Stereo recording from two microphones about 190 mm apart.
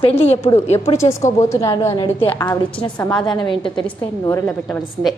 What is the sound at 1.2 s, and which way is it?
A woman's voice, 15° left (ahead or behind).